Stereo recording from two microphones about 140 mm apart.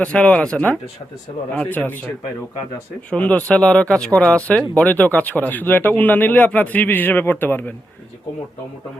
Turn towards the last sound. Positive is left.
turn(degrees=15)  # may be behind; listen again after turning